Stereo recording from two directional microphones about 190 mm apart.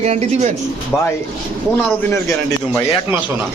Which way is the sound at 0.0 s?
35° right (ahead or behind).